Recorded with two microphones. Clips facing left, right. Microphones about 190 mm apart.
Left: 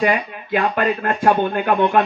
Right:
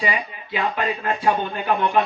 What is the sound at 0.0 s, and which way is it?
A man's voice, 55° left (ahead or behind).